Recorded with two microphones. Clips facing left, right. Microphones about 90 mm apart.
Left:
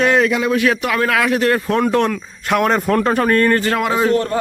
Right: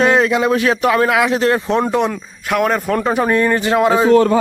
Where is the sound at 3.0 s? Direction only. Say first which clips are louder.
Right 1 dB; 15° right (ahead or behind).